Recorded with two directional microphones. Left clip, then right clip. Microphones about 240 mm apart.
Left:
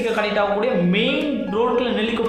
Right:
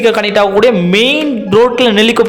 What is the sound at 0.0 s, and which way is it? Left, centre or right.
A man's voice, right.